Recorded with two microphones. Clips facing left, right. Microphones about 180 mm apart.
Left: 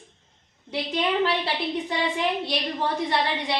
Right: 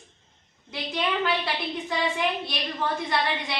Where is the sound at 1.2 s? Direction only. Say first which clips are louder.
Left 2 dB; 30° left (ahead or behind).